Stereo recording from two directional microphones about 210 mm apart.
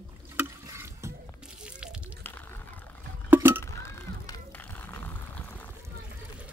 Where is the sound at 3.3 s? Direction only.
10° right (ahead or behind).